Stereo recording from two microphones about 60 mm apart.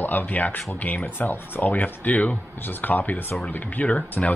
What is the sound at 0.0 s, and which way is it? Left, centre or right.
Speech, left.